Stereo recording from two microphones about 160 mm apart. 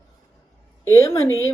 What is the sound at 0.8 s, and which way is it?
Speech, 20° left (ahead or behind).